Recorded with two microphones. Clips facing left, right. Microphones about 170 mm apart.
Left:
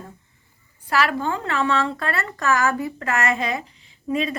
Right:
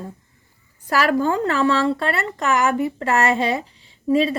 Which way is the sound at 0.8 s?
40° right (ahead or behind).